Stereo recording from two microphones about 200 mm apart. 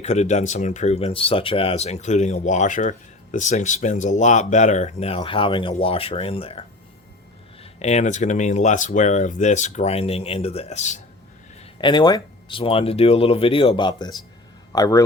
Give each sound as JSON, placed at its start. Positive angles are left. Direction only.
{"t": 0.0, "sound": "speech", "side_deg": 35}
{"t": 11.6, "sound": "speech", "side_deg": 25}